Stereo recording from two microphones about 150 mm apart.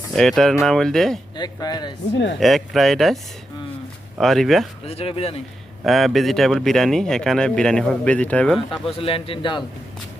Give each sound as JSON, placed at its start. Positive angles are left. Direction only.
{"t": 0.1, "sound": "speech", "side_deg": 0}
{"t": 1.4, "sound": "speech", "side_deg": 25}
{"t": 2.4, "sound": "speech", "side_deg": 0}
{"t": 4.2, "sound": "speech", "side_deg": 0}
{"t": 4.9, "sound": "speech", "side_deg": 40}
{"t": 5.8, "sound": "speech", "side_deg": 0}
{"t": 8.9, "sound": "speech", "side_deg": 40}